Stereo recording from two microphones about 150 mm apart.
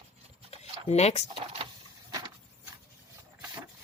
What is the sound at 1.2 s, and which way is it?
Speech, 35° right (ahead or behind).